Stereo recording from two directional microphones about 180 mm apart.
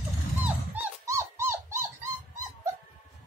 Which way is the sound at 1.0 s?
15° right (ahead or behind).